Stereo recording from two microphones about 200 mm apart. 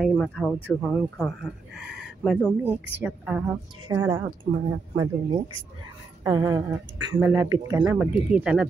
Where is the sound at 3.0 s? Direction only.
5° right (ahead or behind).